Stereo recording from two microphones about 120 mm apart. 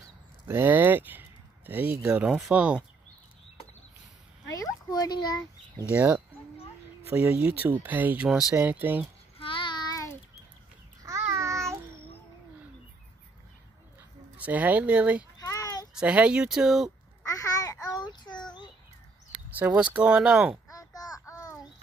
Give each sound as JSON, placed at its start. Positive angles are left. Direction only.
{"t": 0.5, "sound": "speech", "side_deg": -20}
{"t": 4.5, "sound": "a sound", "side_deg": 30}
{"t": 5.9, "sound": "speech", "side_deg": -15}
{"t": 8.3, "sound": "speech", "side_deg": -5}
{"t": 8.5, "sound": "speech", "side_deg": -15}
{"t": 9.4, "sound": "child singing", "side_deg": 45}
{"t": 11.0, "sound": "child singing", "side_deg": -25}
{"t": 14.3, "sound": "speech", "side_deg": -15}
{"t": 15.3, "sound": "a sound", "side_deg": 30}
{"t": 15.9, "sound": "speech", "side_deg": -10}
{"t": 17.2, "sound": "babbling", "side_deg": 25}
{"t": 19.3, "sound": "speech", "side_deg": -10}
{"t": 20.7, "sound": "child singing", "side_deg": 30}